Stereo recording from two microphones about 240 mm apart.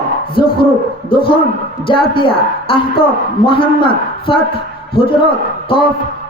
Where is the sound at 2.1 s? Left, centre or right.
Left.